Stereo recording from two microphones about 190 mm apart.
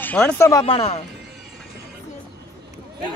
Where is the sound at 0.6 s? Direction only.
30° left (ahead or behind).